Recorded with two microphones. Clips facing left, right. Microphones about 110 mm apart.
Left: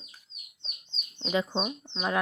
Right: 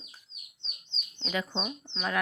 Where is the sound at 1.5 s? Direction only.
10° left (ahead or behind).